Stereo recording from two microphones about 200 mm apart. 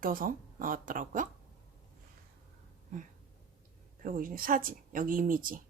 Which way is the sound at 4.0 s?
45° right (ahead or behind).